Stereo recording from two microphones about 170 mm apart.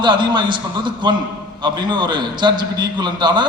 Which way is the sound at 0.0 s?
25° right (ahead or behind).